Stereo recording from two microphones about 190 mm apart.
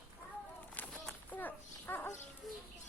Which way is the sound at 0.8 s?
10° left (ahead or behind).